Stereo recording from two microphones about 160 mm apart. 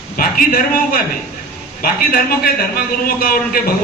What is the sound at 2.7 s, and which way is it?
A man's voice, 70° left (ahead or behind).